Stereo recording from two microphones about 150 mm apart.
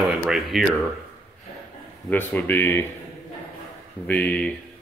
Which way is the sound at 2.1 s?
10° left (ahead or behind).